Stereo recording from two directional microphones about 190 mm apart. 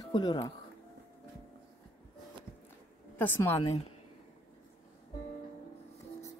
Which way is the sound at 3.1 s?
10° left (ahead or behind).